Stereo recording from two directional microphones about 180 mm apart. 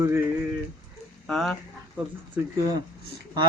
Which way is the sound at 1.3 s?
Centre (ahead or behind).